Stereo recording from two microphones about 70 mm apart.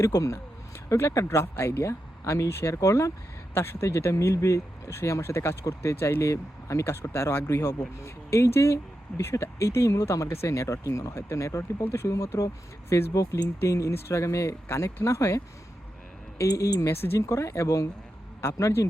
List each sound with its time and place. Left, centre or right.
0.0 s speech: left
16.4 s speech: left
16.8 s speech: left